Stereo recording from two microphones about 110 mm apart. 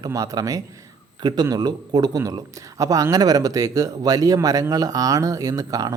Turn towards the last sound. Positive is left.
turn(degrees=-35)  # may be behind; listen again after turning